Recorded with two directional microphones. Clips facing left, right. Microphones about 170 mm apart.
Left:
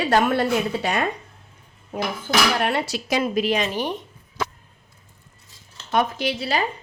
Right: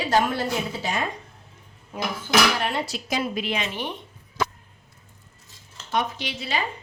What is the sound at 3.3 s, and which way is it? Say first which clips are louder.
Speech: left 6 dB; 40° left (ahead or behind).